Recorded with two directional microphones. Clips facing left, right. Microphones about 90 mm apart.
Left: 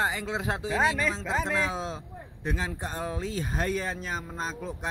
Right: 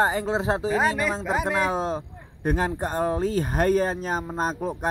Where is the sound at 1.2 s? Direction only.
10° right (ahead or behind).